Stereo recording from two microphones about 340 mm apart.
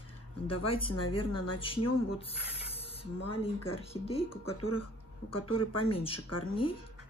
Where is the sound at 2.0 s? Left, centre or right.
Centre.